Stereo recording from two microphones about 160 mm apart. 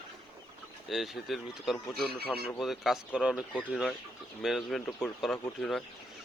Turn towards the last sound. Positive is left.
turn(degrees=5)  # may be behind; listen again after turning